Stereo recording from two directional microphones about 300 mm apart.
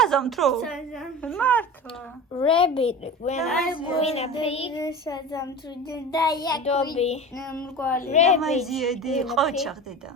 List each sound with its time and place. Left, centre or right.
0.0 s a woman's voice: centre
2.3 s a woman's voice: centre
7.6 s speech: centre
7.9 s a woman's voice: left
8.4 s a woman's voice: centre